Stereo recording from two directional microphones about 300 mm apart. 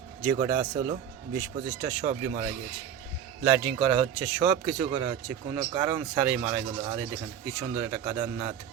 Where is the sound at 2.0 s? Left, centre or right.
Right.